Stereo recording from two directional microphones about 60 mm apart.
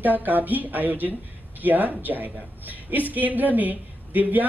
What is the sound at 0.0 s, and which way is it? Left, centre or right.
Speech, right.